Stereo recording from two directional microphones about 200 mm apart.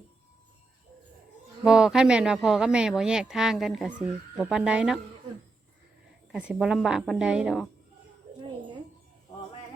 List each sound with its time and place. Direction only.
1.6 s speech: 5° right (ahead or behind)
6.3 s speech: 5° right (ahead or behind)